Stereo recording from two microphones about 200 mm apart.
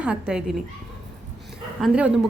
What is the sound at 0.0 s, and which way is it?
Speech, 5° right (ahead or behind).